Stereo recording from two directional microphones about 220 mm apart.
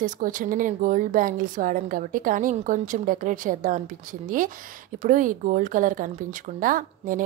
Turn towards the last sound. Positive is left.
turn(degrees=-40)  # may be behind; listen again after turning